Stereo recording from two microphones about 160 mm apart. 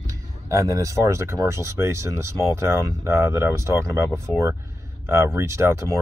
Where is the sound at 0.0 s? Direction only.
20° right (ahead or behind).